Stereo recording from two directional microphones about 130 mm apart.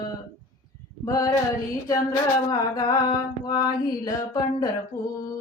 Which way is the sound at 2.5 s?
30° left (ahead or behind).